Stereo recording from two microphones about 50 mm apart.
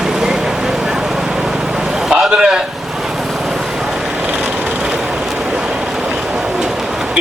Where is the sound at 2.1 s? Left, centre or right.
Centre.